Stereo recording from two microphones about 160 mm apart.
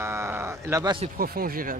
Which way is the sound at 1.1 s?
65° right (ahead or behind).